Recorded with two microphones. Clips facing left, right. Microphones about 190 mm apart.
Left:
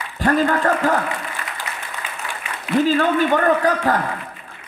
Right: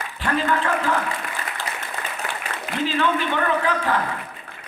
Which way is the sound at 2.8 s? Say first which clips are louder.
Left 5 dB; 45° left (ahead or behind).